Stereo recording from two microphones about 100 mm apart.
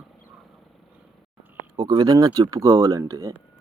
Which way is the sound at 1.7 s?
40° right (ahead or behind).